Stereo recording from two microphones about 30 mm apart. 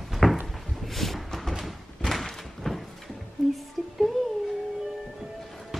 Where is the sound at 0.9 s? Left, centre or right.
Centre.